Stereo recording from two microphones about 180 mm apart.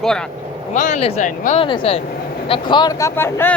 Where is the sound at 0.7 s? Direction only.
40° left (ahead or behind).